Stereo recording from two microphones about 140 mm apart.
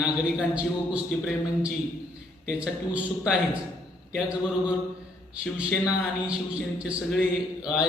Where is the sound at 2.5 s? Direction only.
10° right (ahead or behind).